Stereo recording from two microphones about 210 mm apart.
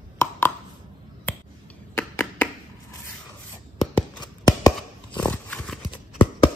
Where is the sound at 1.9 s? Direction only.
10° left (ahead or behind).